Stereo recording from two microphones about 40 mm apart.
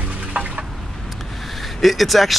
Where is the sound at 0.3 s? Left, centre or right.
Right.